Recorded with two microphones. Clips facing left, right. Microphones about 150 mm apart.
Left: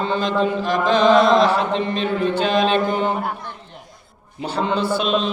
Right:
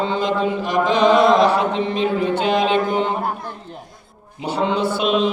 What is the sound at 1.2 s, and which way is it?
Chant, 20° left (ahead or behind).